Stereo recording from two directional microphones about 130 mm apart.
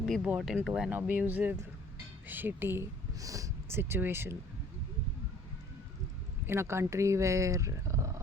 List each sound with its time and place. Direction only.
0.2 s speech: 5° right (ahead or behind)
6.4 s speech: 20° right (ahead or behind)